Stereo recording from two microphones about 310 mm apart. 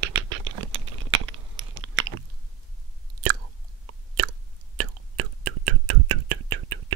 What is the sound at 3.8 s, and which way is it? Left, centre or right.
Chewing, right.